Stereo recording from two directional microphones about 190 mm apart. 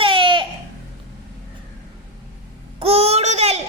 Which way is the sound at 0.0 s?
25° right (ahead or behind).